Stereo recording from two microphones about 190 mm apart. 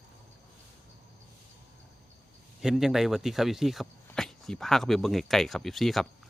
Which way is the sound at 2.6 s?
5° right (ahead or behind).